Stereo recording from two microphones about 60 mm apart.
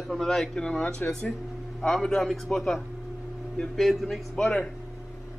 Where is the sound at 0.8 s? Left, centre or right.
Left.